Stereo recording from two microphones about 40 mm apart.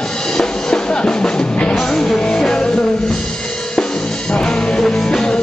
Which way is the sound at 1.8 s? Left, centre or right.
Centre.